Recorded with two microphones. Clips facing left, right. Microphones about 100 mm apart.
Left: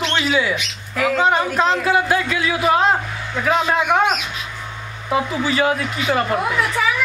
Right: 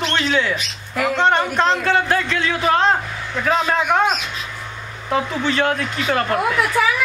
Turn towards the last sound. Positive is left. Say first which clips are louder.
# right 1 dB
turn(degrees=0)  # may be behind; listen again after turning